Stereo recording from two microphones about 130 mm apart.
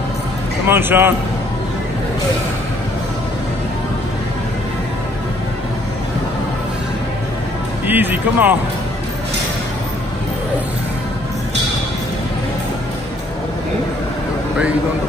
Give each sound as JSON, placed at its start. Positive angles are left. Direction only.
{"t": 0.7, "sound": "a man's voice", "side_deg": -15}
{"t": 7.8, "sound": "speech", "side_deg": -15}